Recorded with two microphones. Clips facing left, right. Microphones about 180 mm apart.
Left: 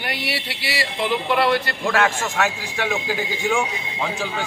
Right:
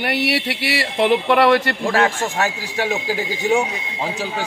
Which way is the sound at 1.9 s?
35° right (ahead or behind).